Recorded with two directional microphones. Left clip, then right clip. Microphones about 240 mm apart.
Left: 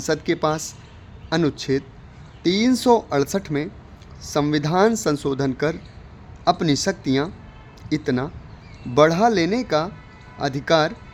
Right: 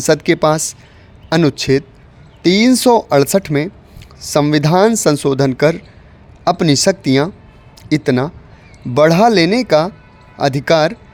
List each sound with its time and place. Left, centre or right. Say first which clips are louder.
0.0 s speech: right 9 dB; right